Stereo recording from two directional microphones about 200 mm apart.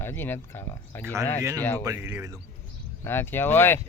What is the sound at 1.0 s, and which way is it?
Speech, 15° right (ahead or behind).